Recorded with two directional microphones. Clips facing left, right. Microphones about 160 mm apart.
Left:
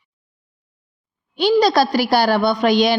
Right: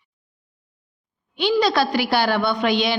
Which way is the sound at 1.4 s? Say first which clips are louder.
Left 4 dB; 40° left (ahead or behind).